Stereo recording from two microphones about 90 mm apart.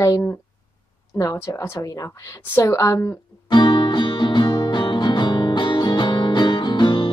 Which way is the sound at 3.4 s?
60° left (ahead or behind).